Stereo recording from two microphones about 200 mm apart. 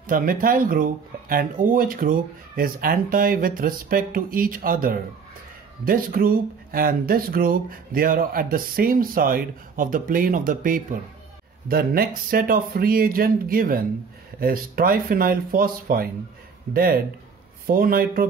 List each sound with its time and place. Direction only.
0.0 s speech: 45° right (ahead or behind)